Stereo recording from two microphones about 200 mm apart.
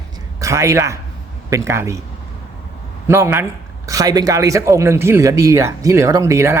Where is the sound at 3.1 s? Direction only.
10° right (ahead or behind).